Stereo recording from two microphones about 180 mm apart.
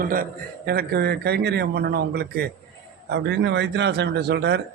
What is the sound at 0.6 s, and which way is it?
A man's voice, 60° right (ahead or behind).